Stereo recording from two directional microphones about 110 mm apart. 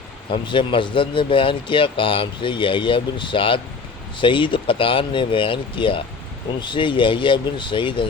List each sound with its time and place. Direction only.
0.3 s speech: 50° left (ahead or behind)